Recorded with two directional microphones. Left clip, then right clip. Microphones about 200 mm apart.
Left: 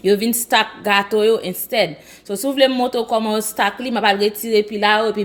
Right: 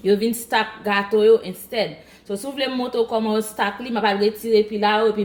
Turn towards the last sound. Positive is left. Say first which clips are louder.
# left 2 dB
turn(degrees=45)  # may be behind; listen again after turning